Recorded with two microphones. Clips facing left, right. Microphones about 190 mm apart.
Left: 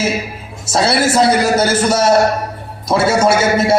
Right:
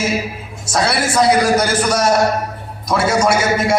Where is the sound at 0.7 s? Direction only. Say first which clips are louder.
Left 4 dB; 25° left (ahead or behind).